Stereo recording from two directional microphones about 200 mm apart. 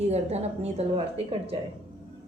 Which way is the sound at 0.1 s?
30° right (ahead or behind).